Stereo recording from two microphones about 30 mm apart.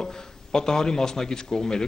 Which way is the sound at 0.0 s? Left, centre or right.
Left.